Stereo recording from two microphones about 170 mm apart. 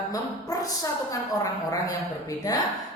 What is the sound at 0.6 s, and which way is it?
Speech, 20° left (ahead or behind).